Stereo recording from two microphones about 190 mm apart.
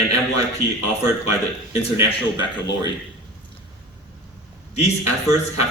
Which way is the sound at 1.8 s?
25° left (ahead or behind).